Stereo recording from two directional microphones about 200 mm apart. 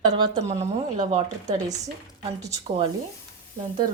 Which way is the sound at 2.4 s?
20° right (ahead or behind).